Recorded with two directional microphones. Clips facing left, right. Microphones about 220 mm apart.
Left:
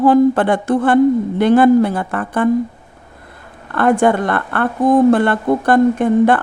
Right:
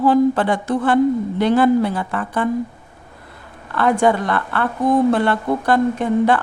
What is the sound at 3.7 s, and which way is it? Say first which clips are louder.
A woman's voice: left 3 dB; 50° left (ahead or behind).